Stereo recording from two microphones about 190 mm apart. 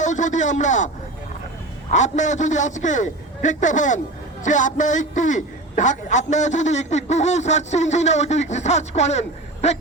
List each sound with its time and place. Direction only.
0.0 s a man's voice: 40° left (ahead or behind)
1.9 s a man's voice: 40° left (ahead or behind)